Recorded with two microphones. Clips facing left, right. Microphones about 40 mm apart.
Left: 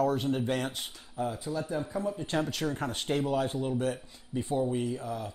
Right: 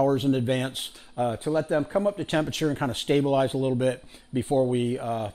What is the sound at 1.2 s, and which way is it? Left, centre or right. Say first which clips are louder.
Speech: right 7 dB; right.